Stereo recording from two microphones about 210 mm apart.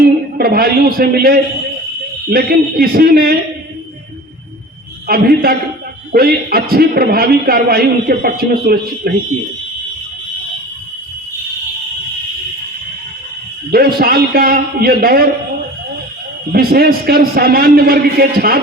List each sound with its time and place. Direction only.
0.3 s a man's voice: 45° right (ahead or behind)
5.0 s a man's voice: 45° right (ahead or behind)
13.7 s a man's voice: 45° right (ahead or behind)
16.5 s a man's voice: 45° right (ahead or behind)